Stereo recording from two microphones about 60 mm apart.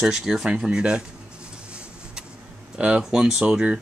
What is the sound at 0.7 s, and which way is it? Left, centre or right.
Speech, centre.